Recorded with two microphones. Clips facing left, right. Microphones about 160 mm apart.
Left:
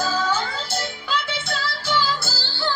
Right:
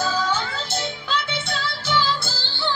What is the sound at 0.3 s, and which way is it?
Music, 10° left (ahead or behind).